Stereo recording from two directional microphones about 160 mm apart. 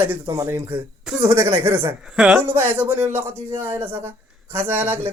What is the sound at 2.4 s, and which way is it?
Speech, 15° right (ahead or behind).